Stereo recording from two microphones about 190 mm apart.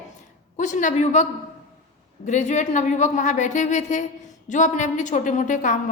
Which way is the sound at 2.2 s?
40° left (ahead or behind).